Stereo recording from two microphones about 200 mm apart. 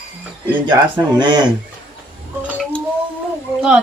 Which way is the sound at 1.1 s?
20° right (ahead or behind).